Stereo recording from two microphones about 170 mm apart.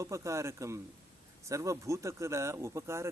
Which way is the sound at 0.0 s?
15° right (ahead or behind).